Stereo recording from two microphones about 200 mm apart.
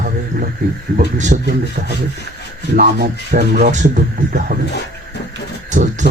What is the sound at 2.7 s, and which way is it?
Speech, 45° right (ahead or behind).